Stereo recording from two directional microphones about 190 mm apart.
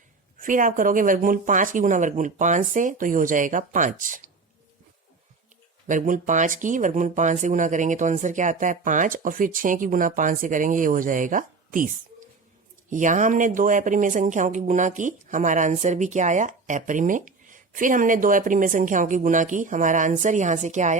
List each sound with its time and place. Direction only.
0.3 s speech: 45° right (ahead or behind)
5.9 s speech: 40° right (ahead or behind)
12.9 s speech: 40° right (ahead or behind)